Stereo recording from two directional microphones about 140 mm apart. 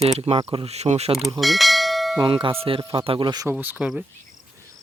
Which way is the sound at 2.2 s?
40° right (ahead or behind).